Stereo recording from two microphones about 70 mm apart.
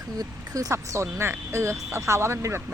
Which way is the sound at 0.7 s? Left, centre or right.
Right.